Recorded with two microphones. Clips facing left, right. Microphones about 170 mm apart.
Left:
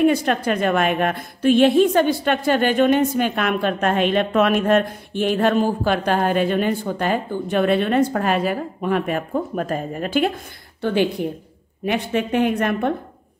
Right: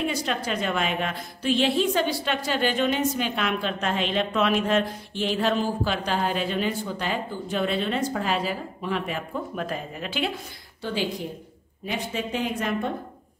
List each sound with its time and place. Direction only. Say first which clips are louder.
0.0 s a woman's voice: left 10 dB; 55° left (ahead or behind)